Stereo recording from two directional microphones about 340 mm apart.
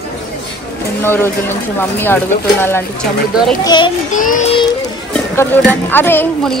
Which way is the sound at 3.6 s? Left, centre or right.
Centre.